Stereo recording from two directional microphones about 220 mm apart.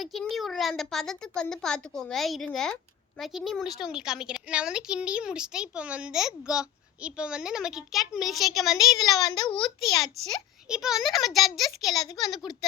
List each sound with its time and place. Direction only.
0.0 s a woman's voice: centre (ahead or behind)
9.1 s a child's voice: 20° left (ahead or behind)
10.2 s a woman's voice: centre (ahead or behind)